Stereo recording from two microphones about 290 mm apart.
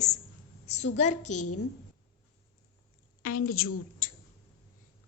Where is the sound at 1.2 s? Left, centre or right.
Left.